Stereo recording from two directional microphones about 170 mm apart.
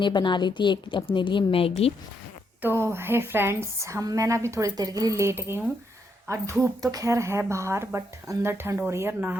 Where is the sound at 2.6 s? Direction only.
15° right (ahead or behind).